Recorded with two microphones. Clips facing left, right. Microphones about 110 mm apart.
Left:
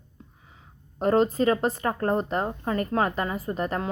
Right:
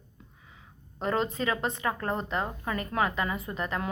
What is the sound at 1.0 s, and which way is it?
A woman's voice, 40° left (ahead or behind).